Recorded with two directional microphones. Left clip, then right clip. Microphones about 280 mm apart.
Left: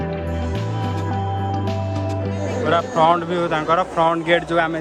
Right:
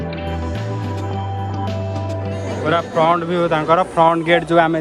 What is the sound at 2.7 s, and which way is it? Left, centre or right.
A man's voice, centre.